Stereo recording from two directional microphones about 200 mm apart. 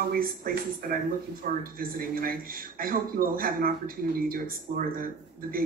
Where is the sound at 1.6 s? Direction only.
45° right (ahead or behind).